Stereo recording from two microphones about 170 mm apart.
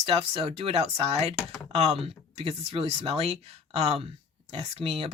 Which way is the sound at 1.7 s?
35° right (ahead or behind).